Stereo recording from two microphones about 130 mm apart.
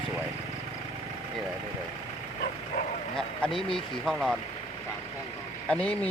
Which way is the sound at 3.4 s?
5° left (ahead or behind).